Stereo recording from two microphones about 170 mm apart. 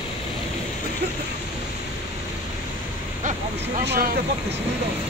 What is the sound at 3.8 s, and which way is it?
Speech, 65° right (ahead or behind).